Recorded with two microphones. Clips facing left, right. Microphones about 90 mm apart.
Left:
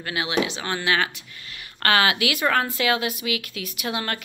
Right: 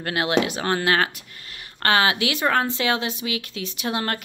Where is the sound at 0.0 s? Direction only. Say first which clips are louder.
Right 3 dB; 55° right (ahead or behind).